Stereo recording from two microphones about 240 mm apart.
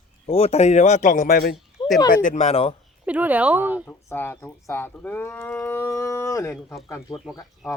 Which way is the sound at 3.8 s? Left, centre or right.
Centre.